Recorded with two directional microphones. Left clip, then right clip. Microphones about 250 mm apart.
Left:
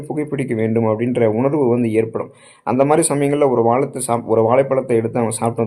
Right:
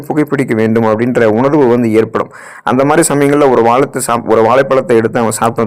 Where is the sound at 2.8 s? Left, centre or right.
Right.